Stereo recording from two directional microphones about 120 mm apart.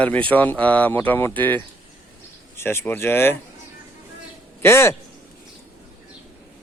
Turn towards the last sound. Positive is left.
turn(degrees=20)  # may be behind; listen again after turning